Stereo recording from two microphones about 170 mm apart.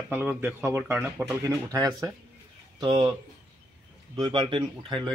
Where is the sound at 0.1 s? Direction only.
10° right (ahead or behind); by 3.1 s 25° right (ahead or behind).